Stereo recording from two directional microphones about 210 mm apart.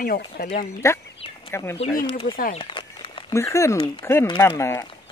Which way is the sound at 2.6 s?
20° left (ahead or behind).